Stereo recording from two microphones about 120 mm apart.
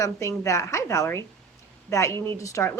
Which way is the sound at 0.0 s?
25° left (ahead or behind).